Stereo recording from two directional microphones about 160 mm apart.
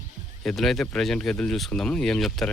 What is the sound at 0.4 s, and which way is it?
Speech, centre (ahead or behind).